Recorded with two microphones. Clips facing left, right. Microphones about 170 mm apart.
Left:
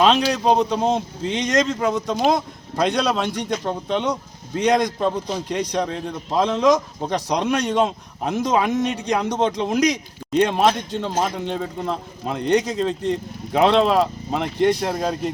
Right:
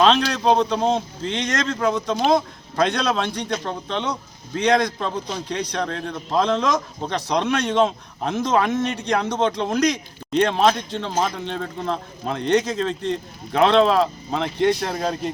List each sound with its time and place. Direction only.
0.0 s a man's voice: 5° left (ahead or behind)